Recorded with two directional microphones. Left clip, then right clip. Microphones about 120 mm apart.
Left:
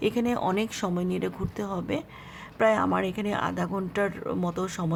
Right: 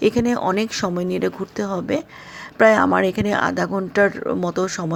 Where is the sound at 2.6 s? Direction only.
45° right (ahead or behind).